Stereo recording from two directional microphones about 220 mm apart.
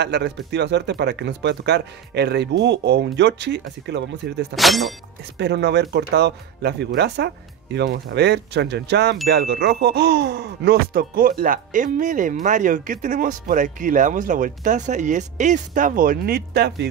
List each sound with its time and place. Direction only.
0.0 s speech: 50° right (ahead or behind)
4.6 s speech: centre (ahead or behind)
5.4 s speech: 50° right (ahead or behind)